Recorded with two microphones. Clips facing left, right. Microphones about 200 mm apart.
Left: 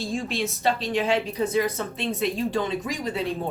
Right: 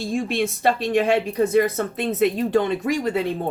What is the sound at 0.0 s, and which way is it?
Speech, 60° right (ahead or behind).